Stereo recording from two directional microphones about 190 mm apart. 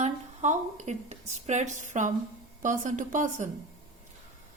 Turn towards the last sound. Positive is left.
turn(degrees=-40)  # may be behind; listen again after turning